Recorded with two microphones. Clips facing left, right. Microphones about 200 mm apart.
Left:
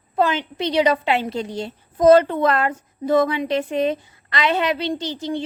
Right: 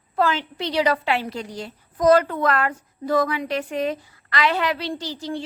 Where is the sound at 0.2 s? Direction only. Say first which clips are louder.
Left 2 dB; 20° left (ahead or behind).